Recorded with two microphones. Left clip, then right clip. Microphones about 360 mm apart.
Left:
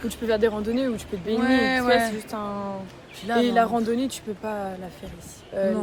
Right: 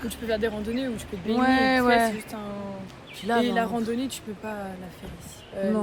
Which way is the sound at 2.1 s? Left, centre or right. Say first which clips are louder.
Left 5 dB; centre.